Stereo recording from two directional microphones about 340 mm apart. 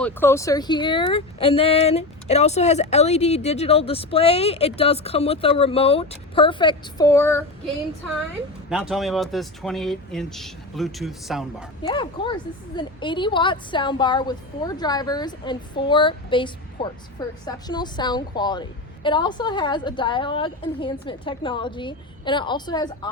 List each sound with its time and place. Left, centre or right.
0.0 s a woman's voice: centre
8.7 s speech: centre
11.8 s a woman's voice: centre